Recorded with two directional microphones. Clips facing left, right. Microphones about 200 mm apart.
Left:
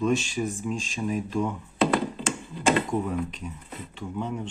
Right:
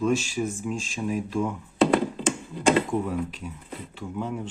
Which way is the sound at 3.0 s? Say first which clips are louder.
Even; 5° right (ahead or behind).